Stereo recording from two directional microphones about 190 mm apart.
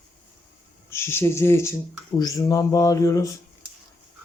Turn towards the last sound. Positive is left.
turn(degrees=15)  # may be behind; listen again after turning